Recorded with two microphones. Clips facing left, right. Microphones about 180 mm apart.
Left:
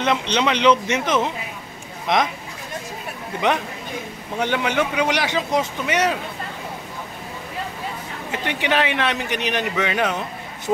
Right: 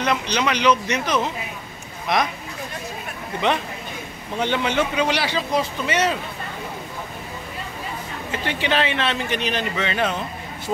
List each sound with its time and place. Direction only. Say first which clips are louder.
0.0 s speech: left 2 dB; 25° left (ahead or behind)
3.3 s a man's voice: left 1 dB; 15° left (ahead or behind)
8.3 s a man's voice: left 1 dB; 15° left (ahead or behind)